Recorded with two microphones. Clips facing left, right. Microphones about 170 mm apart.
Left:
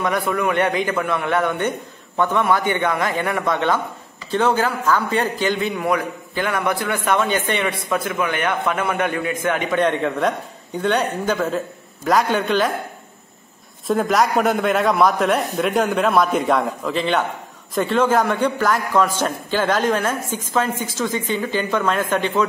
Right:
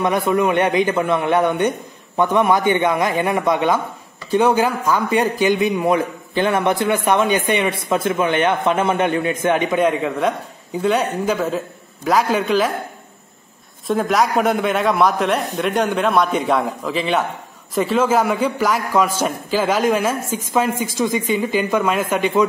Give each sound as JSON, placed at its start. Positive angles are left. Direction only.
{"t": 0.0, "sound": "a man's voice", "side_deg": -20}
{"t": 13.8, "sound": "a man's voice", "side_deg": 0}